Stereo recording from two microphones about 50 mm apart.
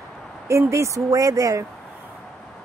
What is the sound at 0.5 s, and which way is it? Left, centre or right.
Speech, right.